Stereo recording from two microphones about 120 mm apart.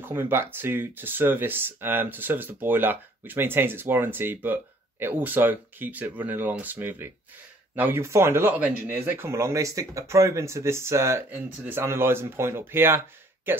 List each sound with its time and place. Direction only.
0.0 s speech: 20° right (ahead or behind)